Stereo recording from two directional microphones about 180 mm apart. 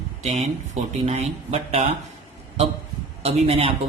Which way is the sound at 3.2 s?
35° right (ahead or behind).